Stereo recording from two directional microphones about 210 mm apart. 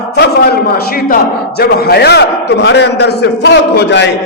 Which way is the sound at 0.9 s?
45° left (ahead or behind).